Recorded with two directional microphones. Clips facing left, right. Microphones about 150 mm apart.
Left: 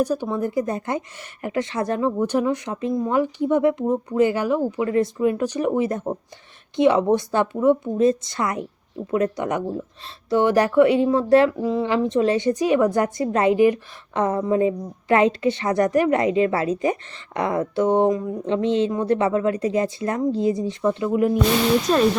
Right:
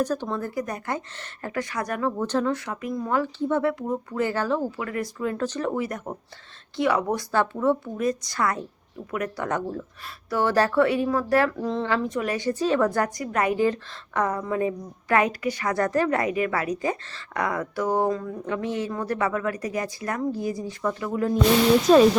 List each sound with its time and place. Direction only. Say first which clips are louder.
0.0 s a woman's voice: left 4 dB; 10° left (ahead or behind)
11.6 s a woman's voice: left 4 dB; 5° left (ahead or behind)
11.9 s a woman's voice: left 6 dB; 20° left (ahead or behind)
21.8 s speech: right 3 dB; centre (ahead or behind)